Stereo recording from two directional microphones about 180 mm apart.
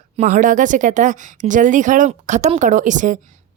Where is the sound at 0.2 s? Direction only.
45° right (ahead or behind).